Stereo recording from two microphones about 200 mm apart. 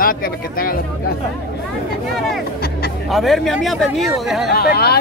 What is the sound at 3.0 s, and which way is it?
Speech, centre (ahead or behind).